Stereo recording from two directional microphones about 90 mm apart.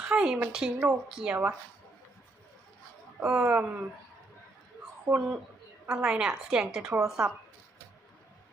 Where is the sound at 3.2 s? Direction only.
10° right (ahead or behind).